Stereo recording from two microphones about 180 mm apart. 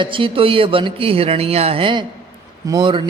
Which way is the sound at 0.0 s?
30° right (ahead or behind).